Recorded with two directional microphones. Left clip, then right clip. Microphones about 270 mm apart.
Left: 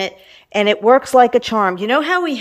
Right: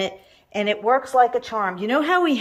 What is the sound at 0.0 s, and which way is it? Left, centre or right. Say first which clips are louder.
Speech: left 3 dB; centre.